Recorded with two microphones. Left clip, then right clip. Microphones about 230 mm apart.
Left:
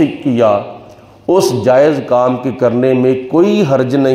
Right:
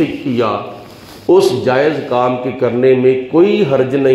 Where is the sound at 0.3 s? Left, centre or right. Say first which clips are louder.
Left 5 dB; left.